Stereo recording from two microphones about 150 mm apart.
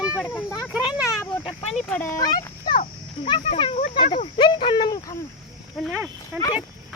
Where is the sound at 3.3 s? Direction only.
35° left (ahead or behind).